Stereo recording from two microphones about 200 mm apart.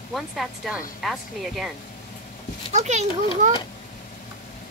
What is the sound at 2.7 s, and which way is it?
Speech, 35° right (ahead or behind).